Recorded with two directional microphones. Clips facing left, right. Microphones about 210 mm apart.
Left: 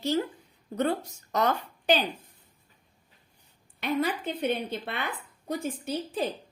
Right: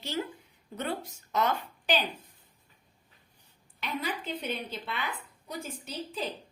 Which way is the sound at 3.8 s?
50° left (ahead or behind).